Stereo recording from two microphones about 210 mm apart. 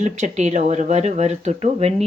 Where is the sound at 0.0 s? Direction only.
35° right (ahead or behind).